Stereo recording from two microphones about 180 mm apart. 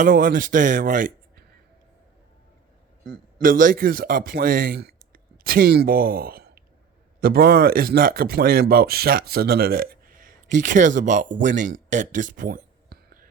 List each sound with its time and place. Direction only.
0.0 s speech: 50° right (ahead or behind)
3.4 s speech: 50° right (ahead or behind)
11.4 s a sound: 45° right (ahead or behind)